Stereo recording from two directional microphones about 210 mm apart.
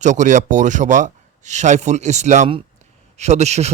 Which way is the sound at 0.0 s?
35° right (ahead or behind).